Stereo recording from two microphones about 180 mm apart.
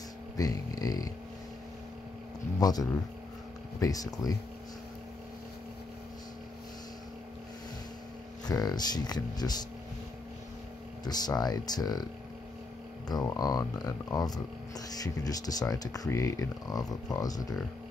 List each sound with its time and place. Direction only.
0.4 s speech: 20° left (ahead or behind)
2.6 s speech: 20° left (ahead or behind)
8.5 s speech: 20° left (ahead or behind)
11.1 s speech: 20° left (ahead or behind)
13.1 s speech: 20° left (ahead or behind)